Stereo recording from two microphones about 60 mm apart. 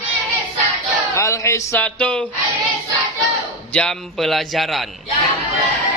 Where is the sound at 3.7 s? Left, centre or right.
Centre.